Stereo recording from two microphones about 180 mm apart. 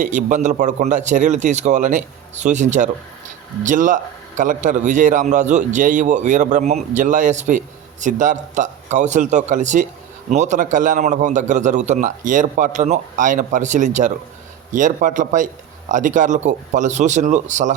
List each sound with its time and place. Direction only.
0.0 s a man's voice: 45° right (ahead or behind)